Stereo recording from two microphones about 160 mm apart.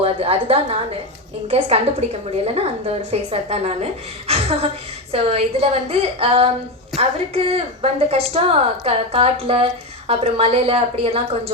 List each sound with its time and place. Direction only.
0.0 s a woman's voice: 35° right (ahead or behind)